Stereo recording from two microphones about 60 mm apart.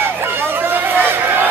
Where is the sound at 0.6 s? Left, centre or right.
Right.